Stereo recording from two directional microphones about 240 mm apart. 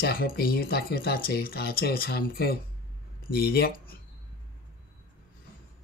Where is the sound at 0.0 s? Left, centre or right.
Left.